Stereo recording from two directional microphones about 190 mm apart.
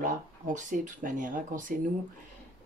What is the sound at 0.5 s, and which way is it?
Speech, 40° right (ahead or behind).